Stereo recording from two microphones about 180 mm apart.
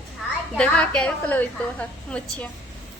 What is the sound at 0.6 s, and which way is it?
A woman's voice, 5° left (ahead or behind).